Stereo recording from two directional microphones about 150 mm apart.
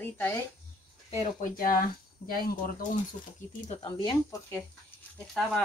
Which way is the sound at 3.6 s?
35° left (ahead or behind).